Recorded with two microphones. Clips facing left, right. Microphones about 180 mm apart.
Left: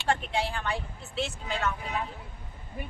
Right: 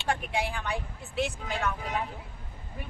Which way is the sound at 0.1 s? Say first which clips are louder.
Left 1 dB; 10° right (ahead or behind).